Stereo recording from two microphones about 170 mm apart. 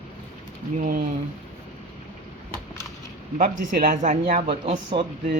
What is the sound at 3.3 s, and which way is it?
Speech, 50° right (ahead or behind).